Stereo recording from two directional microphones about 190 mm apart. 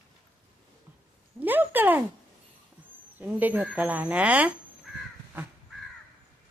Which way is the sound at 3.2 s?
10° right (ahead or behind).